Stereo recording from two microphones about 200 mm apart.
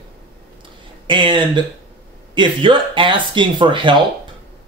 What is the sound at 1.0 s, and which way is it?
A man's voice, 25° right (ahead or behind).